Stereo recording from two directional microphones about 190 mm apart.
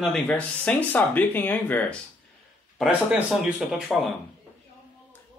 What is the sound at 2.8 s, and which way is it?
Speech, 5° right (ahead or behind).